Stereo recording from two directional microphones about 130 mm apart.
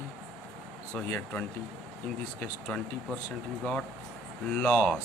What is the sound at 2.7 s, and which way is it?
Speech, 10° left (ahead or behind).